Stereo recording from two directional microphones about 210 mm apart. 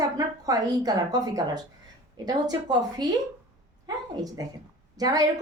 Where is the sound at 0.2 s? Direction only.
15° right (ahead or behind).